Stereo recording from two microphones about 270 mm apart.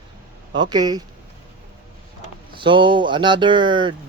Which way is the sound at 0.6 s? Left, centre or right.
Centre.